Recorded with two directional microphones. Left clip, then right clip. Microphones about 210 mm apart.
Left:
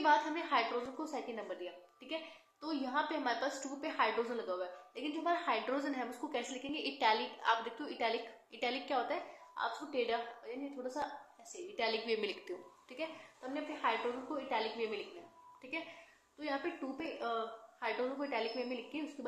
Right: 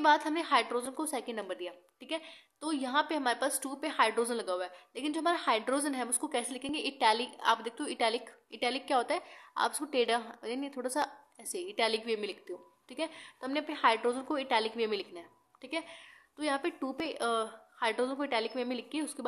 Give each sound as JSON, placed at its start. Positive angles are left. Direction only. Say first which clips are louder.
{"t": 0.0, "sound": "a woman's voice", "louder": "right 4 dB", "side_deg": -35}